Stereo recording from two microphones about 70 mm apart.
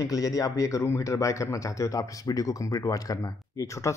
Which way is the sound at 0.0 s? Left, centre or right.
Left.